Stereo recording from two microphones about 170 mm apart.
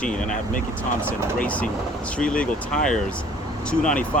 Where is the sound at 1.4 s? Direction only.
10° left (ahead or behind).